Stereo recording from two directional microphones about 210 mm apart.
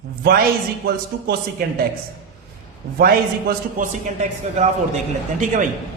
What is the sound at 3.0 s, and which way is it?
A man's voice, 40° right (ahead or behind).